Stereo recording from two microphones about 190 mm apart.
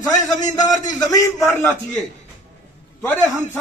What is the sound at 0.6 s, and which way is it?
Speech, 40° left (ahead or behind).